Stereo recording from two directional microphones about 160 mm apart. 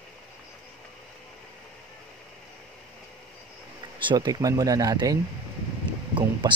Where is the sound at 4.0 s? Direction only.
30° right (ahead or behind).